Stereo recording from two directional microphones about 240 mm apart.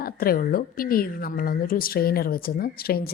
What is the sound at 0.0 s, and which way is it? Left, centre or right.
A woman's voice, left.